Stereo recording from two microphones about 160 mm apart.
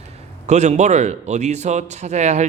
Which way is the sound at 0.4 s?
45° right (ahead or behind).